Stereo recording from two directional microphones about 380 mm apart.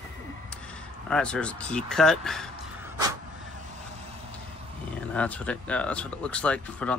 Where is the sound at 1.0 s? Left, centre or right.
Centre.